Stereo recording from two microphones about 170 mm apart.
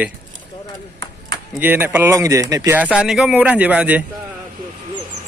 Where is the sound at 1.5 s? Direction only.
10° right (ahead or behind).